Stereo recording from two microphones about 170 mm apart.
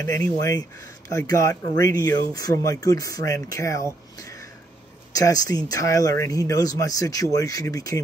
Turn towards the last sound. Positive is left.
turn(degrees=20)  # may be behind; listen again after turning